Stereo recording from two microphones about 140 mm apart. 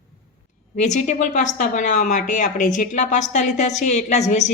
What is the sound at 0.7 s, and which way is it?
Speech, 60° left (ahead or behind).